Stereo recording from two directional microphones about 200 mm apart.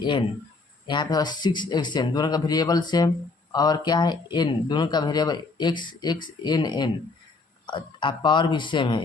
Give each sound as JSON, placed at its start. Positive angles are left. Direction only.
{"t": 0.0, "sound": "speech", "side_deg": 20}